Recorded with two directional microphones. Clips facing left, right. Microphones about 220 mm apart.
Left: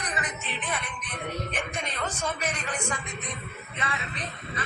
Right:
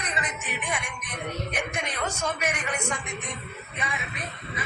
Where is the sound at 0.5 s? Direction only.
15° right (ahead or behind).